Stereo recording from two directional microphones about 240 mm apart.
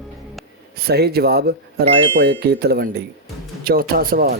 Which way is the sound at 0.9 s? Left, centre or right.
Right.